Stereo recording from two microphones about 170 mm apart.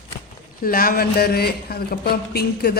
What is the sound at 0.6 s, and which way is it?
Speech, 60° left (ahead or behind).